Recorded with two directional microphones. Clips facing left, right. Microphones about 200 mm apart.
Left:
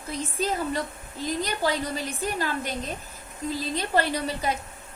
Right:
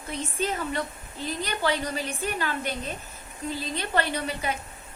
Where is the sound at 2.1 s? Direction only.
35° left (ahead or behind).